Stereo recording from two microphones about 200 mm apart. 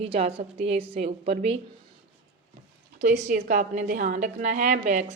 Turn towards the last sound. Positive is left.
turn(degrees=-35)  # may be behind; listen again after turning